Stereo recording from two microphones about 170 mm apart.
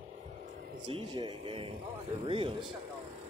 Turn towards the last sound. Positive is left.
turn(degrees=-30)  # may be behind; listen again after turning